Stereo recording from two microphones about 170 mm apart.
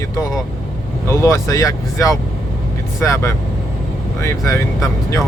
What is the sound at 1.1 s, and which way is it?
Speech, 15° left (ahead or behind).